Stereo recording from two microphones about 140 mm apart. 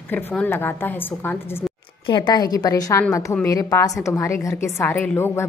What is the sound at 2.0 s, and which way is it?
A woman's voice, 35° left (ahead or behind).